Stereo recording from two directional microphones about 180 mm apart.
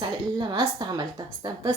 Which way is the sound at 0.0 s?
25° right (ahead or behind).